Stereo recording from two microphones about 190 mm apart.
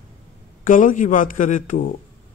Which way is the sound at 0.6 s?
45° left (ahead or behind).